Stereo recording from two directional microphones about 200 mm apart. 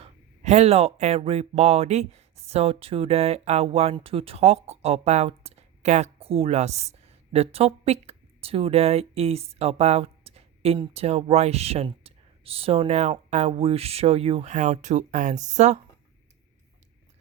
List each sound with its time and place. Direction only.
0.0 s speech: 35° right (ahead or behind)